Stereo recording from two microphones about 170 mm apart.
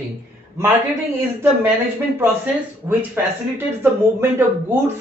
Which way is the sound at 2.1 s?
10° right (ahead or behind).